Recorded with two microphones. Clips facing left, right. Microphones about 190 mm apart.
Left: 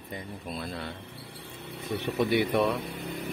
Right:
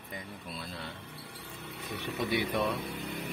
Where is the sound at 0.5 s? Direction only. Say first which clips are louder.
Left 6 dB; 60° left (ahead or behind).